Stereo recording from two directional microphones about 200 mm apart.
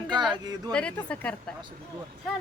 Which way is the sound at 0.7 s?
5° left (ahead or behind).